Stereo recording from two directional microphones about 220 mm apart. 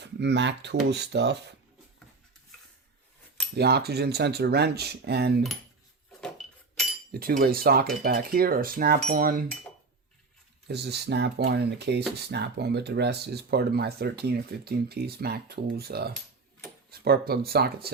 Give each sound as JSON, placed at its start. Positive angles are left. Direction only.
{"t": 0.0, "sound": "speech", "side_deg": -50}
{"t": 3.5, "sound": "speech", "side_deg": -45}
{"t": 6.1, "sound": "a sound", "side_deg": 5}
{"t": 7.1, "sound": "cutlery", "side_deg": -40}
{"t": 10.7, "sound": "speech", "side_deg": -50}